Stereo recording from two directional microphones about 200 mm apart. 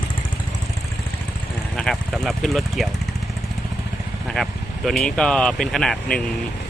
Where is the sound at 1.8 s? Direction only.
Centre (ahead or behind).